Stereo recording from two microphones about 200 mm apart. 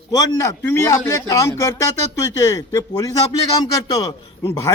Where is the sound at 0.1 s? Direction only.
15° left (ahead or behind).